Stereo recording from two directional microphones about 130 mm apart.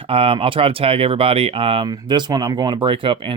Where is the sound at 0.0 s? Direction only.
45° right (ahead or behind).